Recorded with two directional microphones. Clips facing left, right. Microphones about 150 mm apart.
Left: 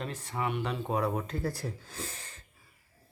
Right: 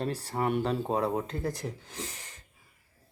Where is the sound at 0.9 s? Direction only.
25° right (ahead or behind).